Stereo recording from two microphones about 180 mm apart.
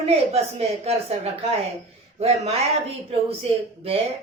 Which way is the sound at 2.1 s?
35° right (ahead or behind).